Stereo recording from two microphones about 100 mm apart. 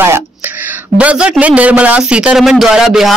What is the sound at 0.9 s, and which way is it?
A man's voice, 10° right (ahead or behind).